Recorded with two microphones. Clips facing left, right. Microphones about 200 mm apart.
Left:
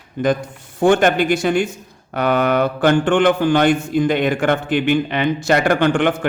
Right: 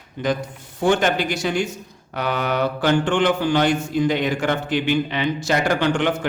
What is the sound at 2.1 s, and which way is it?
Mantra, 55° left (ahead or behind).